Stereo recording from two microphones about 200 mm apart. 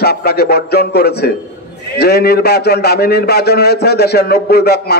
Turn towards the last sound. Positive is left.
turn(degrees=55)  # may be behind; listen again after turning